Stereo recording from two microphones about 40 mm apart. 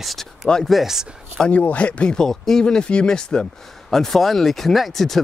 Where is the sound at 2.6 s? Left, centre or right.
Left.